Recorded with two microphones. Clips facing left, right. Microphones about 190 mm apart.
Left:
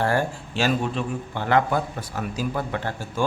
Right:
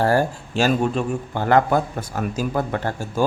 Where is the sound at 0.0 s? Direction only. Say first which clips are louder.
Right 4 dB; 40° right (ahead or behind).